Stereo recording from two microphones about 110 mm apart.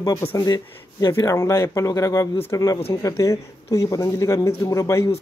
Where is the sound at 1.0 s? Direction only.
30° left (ahead or behind).